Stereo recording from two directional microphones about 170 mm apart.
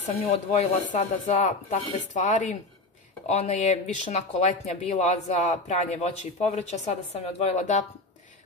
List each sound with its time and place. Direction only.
0.0 s speech: 40° left (ahead or behind)